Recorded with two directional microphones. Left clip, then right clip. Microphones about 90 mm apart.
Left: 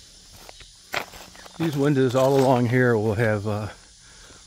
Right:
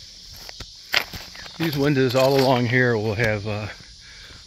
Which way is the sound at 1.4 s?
Centre (ahead or behind).